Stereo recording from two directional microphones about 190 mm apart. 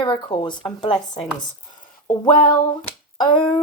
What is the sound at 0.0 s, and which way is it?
Speech, 25° left (ahead or behind).